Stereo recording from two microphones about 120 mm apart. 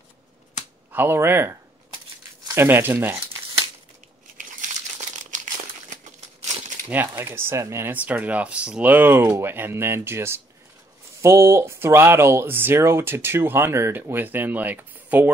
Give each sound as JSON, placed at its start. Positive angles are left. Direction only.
{"t": 0.9, "sound": "speech", "side_deg": -20}
{"t": 5.3, "sound": "crumpling", "side_deg": -90}
{"t": 6.9, "sound": "speech", "side_deg": -20}